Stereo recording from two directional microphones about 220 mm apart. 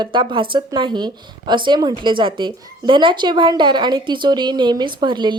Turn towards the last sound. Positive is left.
turn(degrees=-20)  # may be behind; listen again after turning